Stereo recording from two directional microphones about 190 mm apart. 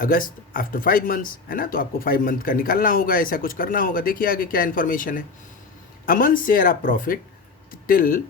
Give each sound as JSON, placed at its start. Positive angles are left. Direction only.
{"t": 0.0, "sound": "speech", "side_deg": 50}